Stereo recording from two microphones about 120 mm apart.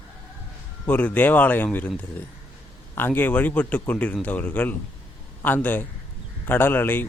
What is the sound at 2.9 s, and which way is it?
A man's voice, 15° left (ahead or behind).